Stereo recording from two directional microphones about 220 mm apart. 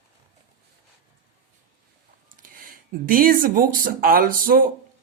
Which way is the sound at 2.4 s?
40° right (ahead or behind).